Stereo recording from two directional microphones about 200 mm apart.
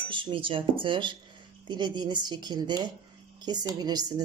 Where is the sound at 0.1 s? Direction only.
25° right (ahead or behind).